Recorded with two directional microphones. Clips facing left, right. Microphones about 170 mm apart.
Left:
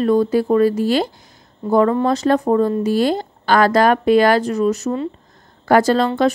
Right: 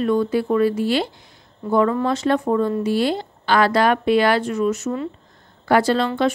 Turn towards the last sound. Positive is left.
turn(degrees=40)  # may be behind; listen again after turning